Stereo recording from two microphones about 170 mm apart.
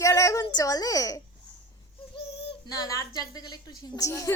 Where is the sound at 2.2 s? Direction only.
80° left.